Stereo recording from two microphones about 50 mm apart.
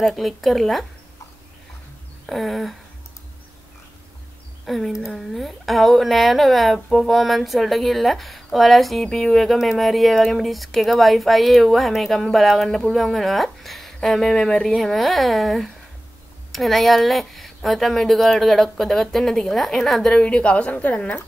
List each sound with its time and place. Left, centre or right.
0.0 s speech: centre
2.2 s speech: centre
4.6 s speech: centre
20.1 s speech: centre